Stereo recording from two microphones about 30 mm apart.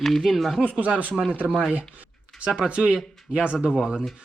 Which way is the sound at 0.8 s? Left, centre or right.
Right.